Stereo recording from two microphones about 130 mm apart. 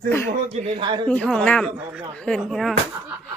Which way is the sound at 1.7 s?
15° right (ahead or behind).